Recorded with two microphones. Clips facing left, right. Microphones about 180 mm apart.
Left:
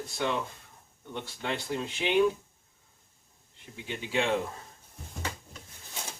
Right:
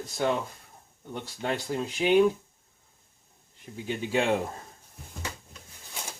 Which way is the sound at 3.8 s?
40° right (ahead or behind).